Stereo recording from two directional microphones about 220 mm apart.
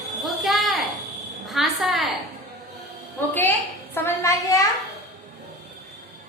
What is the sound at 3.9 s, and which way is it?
Speech, 10° left (ahead or behind).